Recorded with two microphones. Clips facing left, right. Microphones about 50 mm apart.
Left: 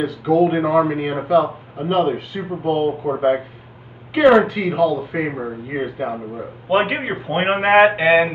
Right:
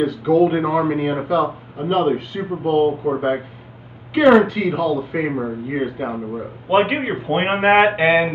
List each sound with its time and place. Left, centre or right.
0.0 s speech: centre